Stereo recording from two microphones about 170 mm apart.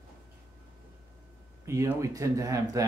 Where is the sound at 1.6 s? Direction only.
15° right (ahead or behind).